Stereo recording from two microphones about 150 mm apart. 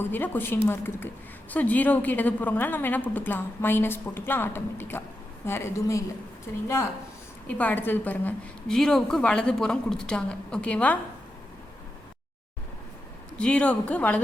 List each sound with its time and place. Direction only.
0.0 s a woman's voice: 15° left (ahead or behind)
13.3 s a woman's voice: 10° left (ahead or behind)